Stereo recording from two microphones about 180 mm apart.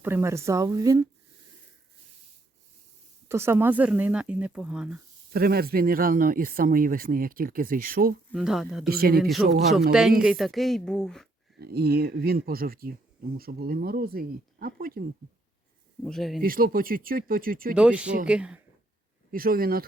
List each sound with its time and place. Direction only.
0.0 s speech: 15° right (ahead or behind)
3.2 s speech: 15° right (ahead or behind)
5.3 s speech: 60° right (ahead or behind)
8.3 s speech: centre (ahead or behind)
8.9 s speech: 55° right (ahead or behind)
9.1 s speech: centre (ahead or behind)
11.6 s speech: 60° right (ahead or behind)
16.0 s speech: centre (ahead or behind)
16.4 s speech: 55° right (ahead or behind)
17.7 s speech: 5° right (ahead or behind)
19.3 s speech: 55° right (ahead or behind)